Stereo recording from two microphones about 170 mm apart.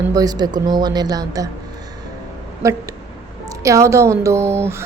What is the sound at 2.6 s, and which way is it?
A woman's voice, 20° right (ahead or behind).